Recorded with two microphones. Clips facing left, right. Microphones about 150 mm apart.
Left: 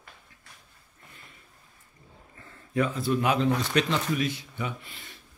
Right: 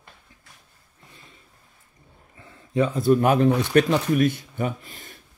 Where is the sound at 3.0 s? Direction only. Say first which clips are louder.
Right 9 dB; 50° right (ahead or behind).